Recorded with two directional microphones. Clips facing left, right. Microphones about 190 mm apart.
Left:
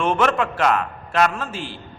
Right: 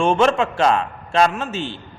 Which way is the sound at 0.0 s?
25° right (ahead or behind).